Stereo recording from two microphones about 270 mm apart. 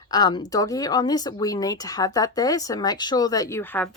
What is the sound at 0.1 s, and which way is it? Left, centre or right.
Speech, centre.